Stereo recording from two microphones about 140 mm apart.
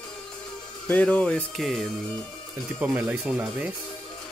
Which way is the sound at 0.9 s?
10° left (ahead or behind).